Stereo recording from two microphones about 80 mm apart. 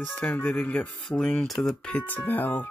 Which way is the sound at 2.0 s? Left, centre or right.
Left.